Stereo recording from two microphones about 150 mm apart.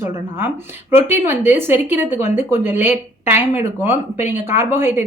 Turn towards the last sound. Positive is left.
turn(degrees=-15)  # may be behind; listen again after turning